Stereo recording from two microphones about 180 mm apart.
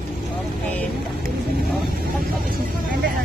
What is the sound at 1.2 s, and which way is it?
Speech, centre (ahead or behind).